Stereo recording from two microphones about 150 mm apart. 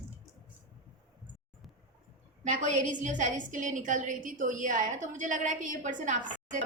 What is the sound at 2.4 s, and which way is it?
A woman's voice, 55° right (ahead or behind).